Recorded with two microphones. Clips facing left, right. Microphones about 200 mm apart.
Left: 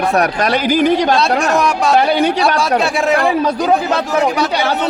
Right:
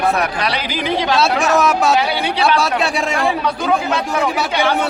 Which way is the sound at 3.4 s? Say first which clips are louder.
Left 4 dB; 40° left (ahead or behind).